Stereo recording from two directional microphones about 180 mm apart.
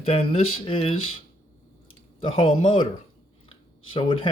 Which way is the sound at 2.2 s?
30° left (ahead or behind).